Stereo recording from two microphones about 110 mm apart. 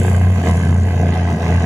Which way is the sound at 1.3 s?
25° right (ahead or behind).